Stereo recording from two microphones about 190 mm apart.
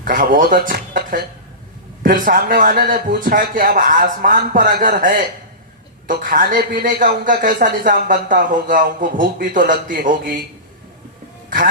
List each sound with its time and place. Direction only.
0.0 s a man's voice: 45° right (ahead or behind)
11.4 s speech: 45° right (ahead or behind)